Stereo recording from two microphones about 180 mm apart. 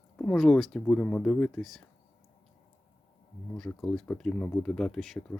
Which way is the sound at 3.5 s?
5° left (ahead or behind).